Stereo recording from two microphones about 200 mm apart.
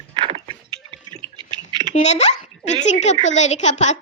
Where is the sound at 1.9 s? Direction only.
35° left (ahead or behind).